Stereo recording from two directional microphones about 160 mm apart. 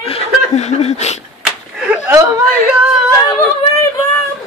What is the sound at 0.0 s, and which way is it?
Chuckle, 40° left (ahead or behind).